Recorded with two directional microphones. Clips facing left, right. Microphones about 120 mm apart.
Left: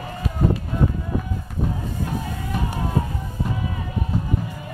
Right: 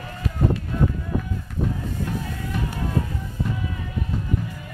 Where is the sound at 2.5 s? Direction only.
15° left (ahead or behind).